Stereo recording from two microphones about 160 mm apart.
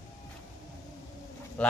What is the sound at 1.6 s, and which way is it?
Speech, 5° left (ahead or behind).